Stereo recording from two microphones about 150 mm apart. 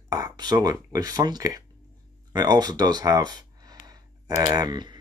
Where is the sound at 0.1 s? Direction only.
25° right (ahead or behind).